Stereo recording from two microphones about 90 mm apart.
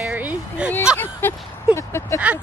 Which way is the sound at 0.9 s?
25° left (ahead or behind).